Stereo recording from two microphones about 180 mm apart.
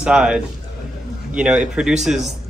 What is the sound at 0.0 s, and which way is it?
Speech, 5° right (ahead or behind).